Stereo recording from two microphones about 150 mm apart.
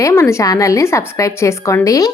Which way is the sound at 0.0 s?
20° left (ahead or behind).